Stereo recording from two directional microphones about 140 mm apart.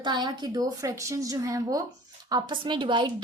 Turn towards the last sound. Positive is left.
turn(degrees=-35)  # may be behind; listen again after turning